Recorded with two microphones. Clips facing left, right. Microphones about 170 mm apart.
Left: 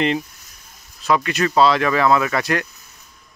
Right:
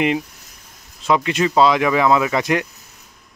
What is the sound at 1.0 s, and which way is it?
Speech, 20° right (ahead or behind).